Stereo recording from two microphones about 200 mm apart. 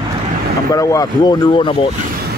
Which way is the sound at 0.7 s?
15° left (ahead or behind).